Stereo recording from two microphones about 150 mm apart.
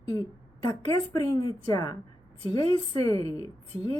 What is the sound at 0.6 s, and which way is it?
A woman's voice, 30° left (ahead or behind).